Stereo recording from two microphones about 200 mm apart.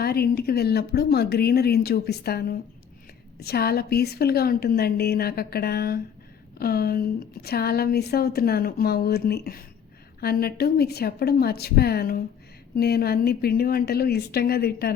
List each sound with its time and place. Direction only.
0.0 s speech: 50° left (ahead or behind)